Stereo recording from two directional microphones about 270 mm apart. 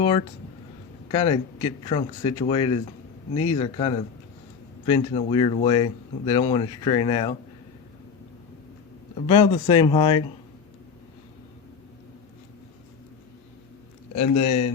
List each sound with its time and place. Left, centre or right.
0.0 s speech: centre
9.1 s speech: centre
14.3 s speech: left